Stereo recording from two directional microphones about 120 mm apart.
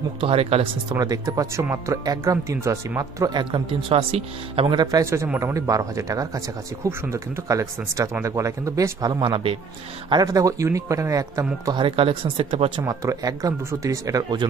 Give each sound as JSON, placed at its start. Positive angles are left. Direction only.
{"t": 0.2, "sound": "speech", "side_deg": -55}
{"t": 0.8, "sound": "speech", "side_deg": -30}
{"t": 3.3, "sound": "speech", "side_deg": -40}
{"t": 4.7, "sound": "speech", "side_deg": -30}
{"t": 10.0, "sound": "speech", "side_deg": -35}
{"t": 11.7, "sound": "speech", "side_deg": -45}
{"t": 12.8, "sound": "speech", "side_deg": -30}